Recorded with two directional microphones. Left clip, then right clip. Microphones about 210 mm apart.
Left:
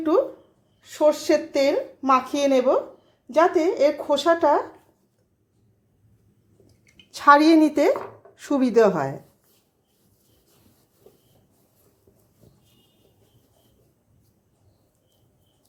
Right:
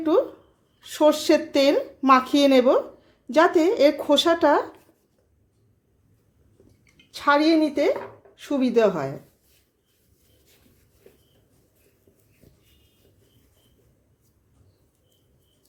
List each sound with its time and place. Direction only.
0.8 s a woman's voice: 20° right (ahead or behind)
7.1 s a woman's voice: 10° left (ahead or behind)